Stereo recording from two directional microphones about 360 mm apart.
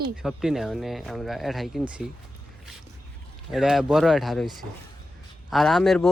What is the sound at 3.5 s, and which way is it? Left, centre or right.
Speech, centre.